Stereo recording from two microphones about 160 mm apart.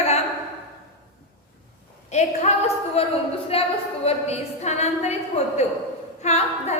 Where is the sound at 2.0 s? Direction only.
45° left (ahead or behind).